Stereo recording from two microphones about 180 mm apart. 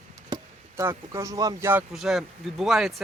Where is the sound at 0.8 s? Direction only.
15° right (ahead or behind).